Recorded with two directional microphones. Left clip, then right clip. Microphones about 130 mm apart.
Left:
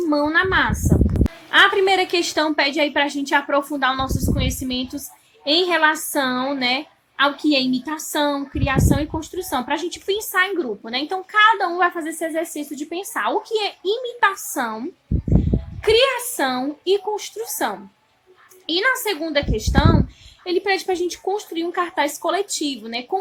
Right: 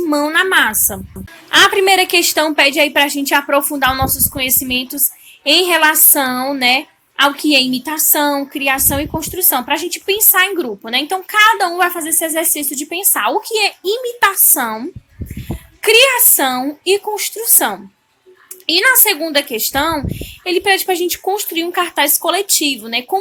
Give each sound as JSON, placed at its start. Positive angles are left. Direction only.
{"t": 0.1, "sound": "a woman's voice", "side_deg": -30}